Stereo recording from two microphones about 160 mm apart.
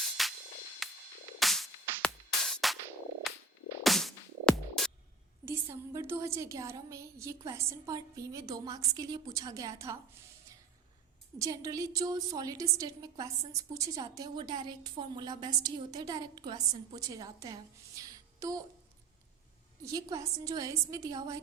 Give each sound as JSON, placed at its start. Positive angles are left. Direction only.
{"t": 0.0, "sound": "music", "side_deg": 0}
{"t": 5.5, "sound": "a woman's voice", "side_deg": -15}
{"t": 11.3, "sound": "a woman's voice", "side_deg": -20}
{"t": 19.8, "sound": "a woman's voice", "side_deg": -20}